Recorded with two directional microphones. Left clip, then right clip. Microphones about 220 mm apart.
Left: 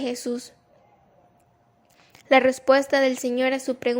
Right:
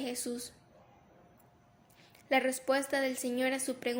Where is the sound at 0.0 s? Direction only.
35° left (ahead or behind).